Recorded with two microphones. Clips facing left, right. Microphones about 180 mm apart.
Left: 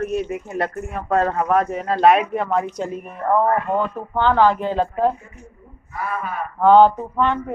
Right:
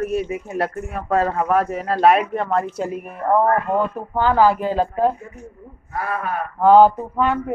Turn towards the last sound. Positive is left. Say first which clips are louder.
# even
turn(degrees=-5)  # may be behind; listen again after turning